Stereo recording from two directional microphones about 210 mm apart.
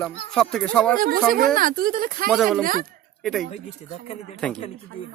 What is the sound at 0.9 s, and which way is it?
Speech, 45° right (ahead or behind).